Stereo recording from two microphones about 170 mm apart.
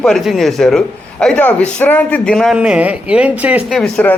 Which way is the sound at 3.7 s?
5° left (ahead or behind).